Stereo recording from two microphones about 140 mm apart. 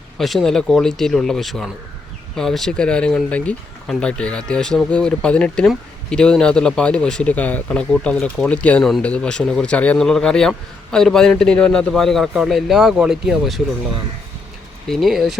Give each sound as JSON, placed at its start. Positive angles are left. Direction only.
{"t": 0.2, "sound": "a man's voice", "side_deg": 0}
{"t": 14.8, "sound": "a man's voice", "side_deg": 0}